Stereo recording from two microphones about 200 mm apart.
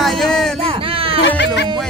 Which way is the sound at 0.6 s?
25° right (ahead or behind).